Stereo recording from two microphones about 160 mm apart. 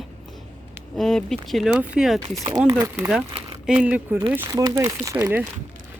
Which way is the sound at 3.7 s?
10° right (ahead or behind).